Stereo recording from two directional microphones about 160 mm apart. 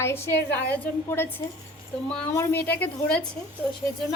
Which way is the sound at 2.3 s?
15° left (ahead or behind).